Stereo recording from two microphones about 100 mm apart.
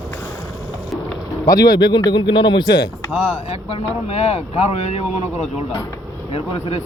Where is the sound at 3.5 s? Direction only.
90° left.